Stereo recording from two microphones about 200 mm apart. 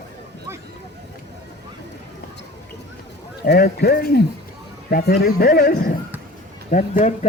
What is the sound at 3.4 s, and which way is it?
A man's voice, 50° left (ahead or behind).